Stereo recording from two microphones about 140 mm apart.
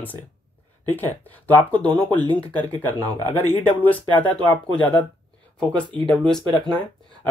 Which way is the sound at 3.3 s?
10° left (ahead or behind).